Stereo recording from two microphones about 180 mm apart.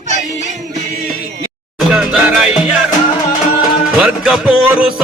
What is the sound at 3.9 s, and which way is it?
Music, 5° right (ahead or behind).